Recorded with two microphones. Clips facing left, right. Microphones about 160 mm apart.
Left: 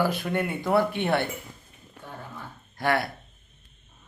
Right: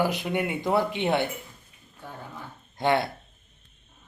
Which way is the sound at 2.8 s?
20° right (ahead or behind).